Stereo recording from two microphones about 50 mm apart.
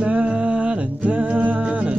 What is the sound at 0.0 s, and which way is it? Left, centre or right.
Music, right.